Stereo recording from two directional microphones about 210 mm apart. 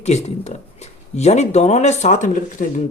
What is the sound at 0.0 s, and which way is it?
Speech, 30° left (ahead or behind).